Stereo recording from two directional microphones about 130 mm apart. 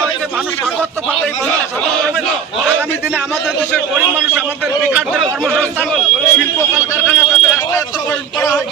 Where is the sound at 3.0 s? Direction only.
5° right (ahead or behind).